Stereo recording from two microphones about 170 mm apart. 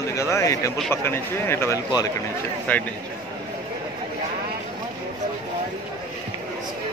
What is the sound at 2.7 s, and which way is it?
Speech, 10° left (ahead or behind).